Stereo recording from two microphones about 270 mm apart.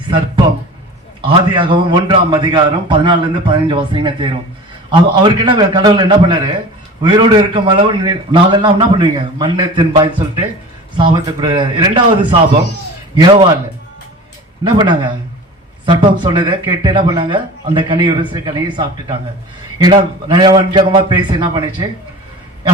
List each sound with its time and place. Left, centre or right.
1.3 s speech: centre
14.6 s speech: centre